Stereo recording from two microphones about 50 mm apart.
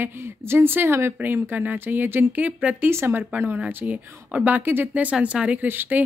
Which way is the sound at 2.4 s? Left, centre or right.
Right.